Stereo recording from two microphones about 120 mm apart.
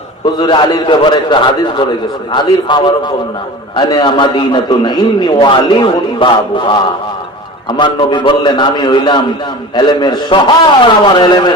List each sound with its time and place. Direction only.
0.3 s a man's voice: 35° left (ahead or behind)